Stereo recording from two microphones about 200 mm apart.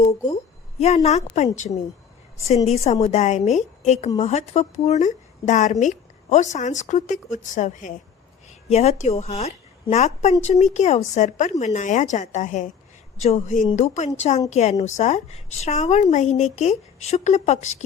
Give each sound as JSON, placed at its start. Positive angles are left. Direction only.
{"t": 0.8, "sound": "a woman's voice", "side_deg": 30}